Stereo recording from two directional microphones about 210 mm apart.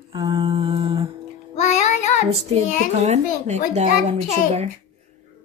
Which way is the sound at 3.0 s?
35° right (ahead or behind).